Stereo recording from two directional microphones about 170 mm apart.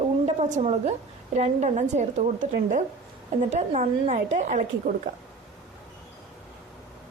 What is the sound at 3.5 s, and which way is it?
A woman's voice, 45° right (ahead or behind).